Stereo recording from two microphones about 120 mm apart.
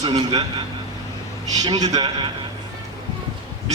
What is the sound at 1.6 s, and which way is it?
Speech, 35° right (ahead or behind).